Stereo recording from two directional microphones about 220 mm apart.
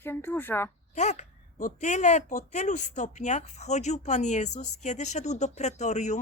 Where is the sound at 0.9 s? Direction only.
30° left (ahead or behind).